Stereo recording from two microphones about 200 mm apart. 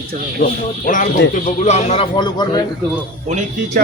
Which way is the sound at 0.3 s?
45° left (ahead or behind).